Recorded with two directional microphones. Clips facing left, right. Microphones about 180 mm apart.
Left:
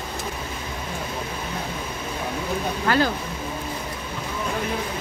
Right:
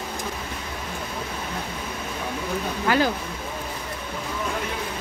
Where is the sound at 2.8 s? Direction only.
10° right (ahead or behind).